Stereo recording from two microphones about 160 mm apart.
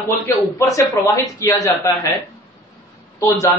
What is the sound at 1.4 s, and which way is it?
Speech, 20° left (ahead or behind).